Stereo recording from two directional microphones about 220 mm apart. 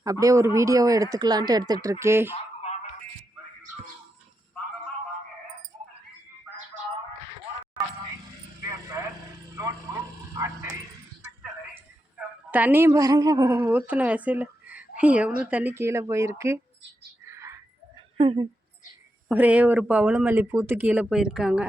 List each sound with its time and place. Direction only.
0.0 s speech: 15° right (ahead or behind)
2.3 s fowl: 30° left (ahead or behind)
8.6 s vehicle: 15° right (ahead or behind)
9.6 s a sound: 15° right (ahead or behind)
12.5 s a woman's voice: 10° right (ahead or behind)
17.2 s a sound: 15° right (ahead or behind)
18.2 s speech: 25° right (ahead or behind)
19.3 s speech: 5° right (ahead or behind)